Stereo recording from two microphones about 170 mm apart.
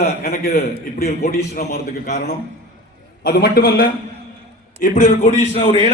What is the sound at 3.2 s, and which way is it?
Speech, 60° left (ahead or behind).